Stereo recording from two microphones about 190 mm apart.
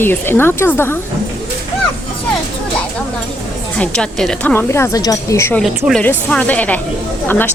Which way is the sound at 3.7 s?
5° left (ahead or behind).